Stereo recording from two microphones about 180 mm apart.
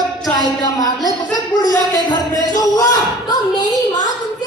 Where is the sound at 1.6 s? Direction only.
20° left (ahead or behind).